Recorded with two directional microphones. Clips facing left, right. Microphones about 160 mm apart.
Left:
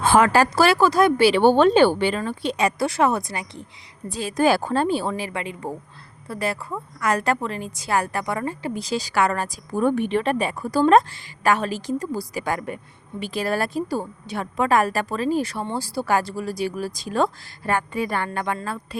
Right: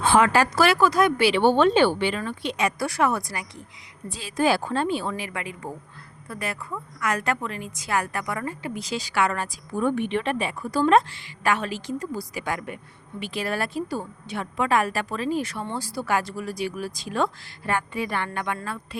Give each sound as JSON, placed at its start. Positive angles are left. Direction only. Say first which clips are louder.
{"t": 0.0, "sound": "a woman's voice", "louder": "left 2 dB", "side_deg": 45}
{"t": 4.1, "sound": "a woman's voice", "louder": "left 3 dB", "side_deg": 45}